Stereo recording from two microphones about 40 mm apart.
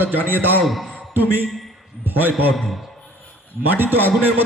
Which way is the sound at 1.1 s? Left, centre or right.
Right.